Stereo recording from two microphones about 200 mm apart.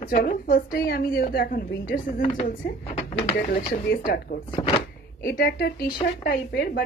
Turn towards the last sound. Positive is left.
turn(degrees=55)  # may be behind; listen again after turning